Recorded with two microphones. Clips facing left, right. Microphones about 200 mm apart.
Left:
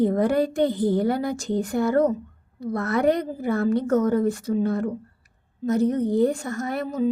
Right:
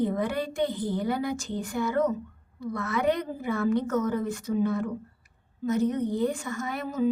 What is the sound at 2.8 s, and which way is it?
Speech, 65° left (ahead or behind).